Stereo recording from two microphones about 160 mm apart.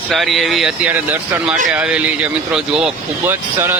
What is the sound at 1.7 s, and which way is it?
Speech, 10° right (ahead or behind).